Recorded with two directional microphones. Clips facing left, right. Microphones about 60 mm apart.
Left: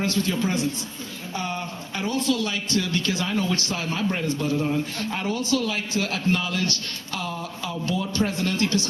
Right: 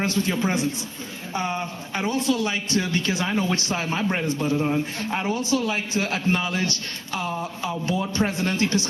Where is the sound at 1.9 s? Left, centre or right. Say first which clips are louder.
Right 1 dB; right.